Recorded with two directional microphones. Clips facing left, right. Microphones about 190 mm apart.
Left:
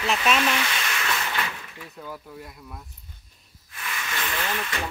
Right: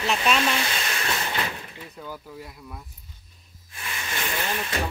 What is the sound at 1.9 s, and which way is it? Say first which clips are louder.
Speech: left 1 dB; centre (ahead or behind).